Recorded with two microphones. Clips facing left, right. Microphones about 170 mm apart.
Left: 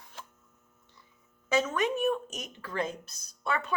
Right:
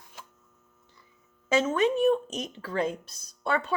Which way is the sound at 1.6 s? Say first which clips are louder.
Right 5 dB; 30° right (ahead or behind).